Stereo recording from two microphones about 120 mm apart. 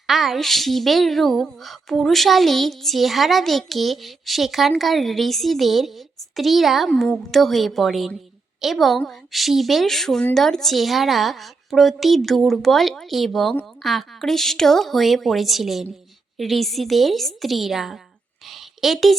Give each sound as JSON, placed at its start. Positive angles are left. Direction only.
{"t": 0.1, "sound": "a woman's voice", "side_deg": 0}